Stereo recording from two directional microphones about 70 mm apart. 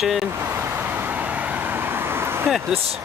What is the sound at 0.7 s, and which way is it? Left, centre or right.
Vehicle, right.